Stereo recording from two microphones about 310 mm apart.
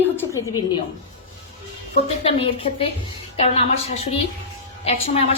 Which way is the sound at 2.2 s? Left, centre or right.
Centre.